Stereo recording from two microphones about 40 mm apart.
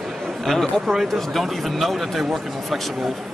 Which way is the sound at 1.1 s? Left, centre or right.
Centre.